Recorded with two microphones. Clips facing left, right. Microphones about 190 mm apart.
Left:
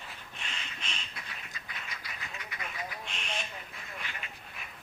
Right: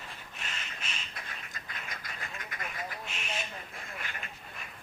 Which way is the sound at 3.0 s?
5° right (ahead or behind).